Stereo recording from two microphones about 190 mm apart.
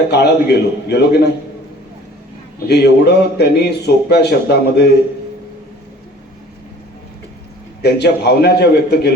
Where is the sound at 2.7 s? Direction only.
60° left (ahead or behind).